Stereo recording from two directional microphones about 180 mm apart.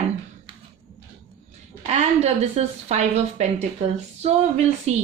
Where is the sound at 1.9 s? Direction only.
40° right (ahead or behind).